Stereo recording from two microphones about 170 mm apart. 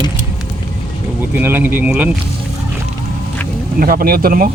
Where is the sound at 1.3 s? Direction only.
10° right (ahead or behind).